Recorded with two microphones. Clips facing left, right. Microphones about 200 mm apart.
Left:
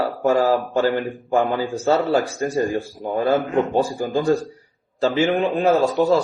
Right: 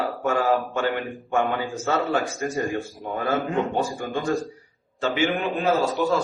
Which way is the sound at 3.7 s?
35° left (ahead or behind).